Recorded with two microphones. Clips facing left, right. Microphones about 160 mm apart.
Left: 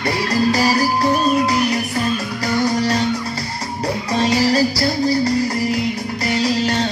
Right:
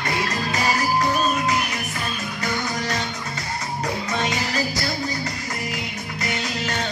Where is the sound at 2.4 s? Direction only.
35° left (ahead or behind).